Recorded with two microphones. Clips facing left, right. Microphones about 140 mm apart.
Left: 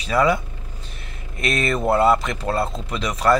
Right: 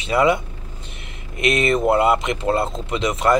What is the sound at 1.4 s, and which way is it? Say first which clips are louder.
A man's voice: right 4 dB; 20° right (ahead or behind).